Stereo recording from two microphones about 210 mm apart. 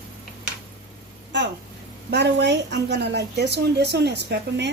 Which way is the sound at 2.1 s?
55° right (ahead or behind).